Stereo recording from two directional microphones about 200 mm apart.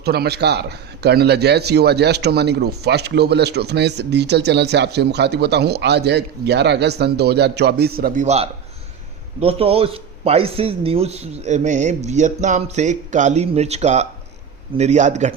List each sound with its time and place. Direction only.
0.0 s speech: 50° right (ahead or behind); by 15.4 s 35° right (ahead or behind)